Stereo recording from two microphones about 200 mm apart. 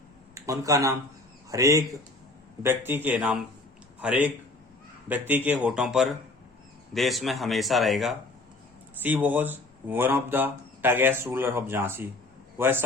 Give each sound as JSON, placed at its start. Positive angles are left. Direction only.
{"t": 0.3, "sound": "a man's voice", "side_deg": -15}